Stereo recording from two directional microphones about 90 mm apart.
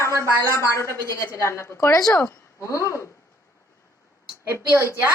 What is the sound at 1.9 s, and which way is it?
A woman's voice, 40° left (ahead or behind).